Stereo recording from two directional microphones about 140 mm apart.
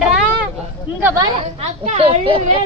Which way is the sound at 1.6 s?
50° right (ahead or behind).